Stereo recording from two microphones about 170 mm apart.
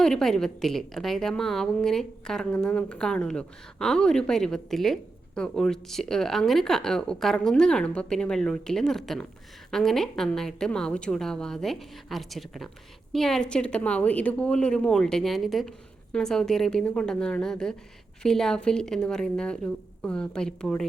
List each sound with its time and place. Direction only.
0.0 s a woman's voice: 5° left (ahead or behind)